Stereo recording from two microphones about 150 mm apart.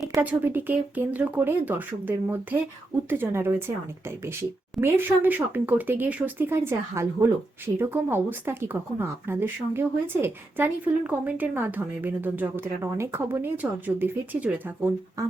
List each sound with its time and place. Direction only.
0.1 s speech: 15° right (ahead or behind)
15.2 s music: 20° right (ahead or behind)